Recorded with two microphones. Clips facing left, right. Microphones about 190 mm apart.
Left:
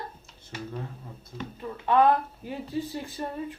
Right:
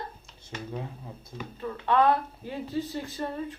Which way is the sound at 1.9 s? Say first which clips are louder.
Left 2 dB; 15° left (ahead or behind).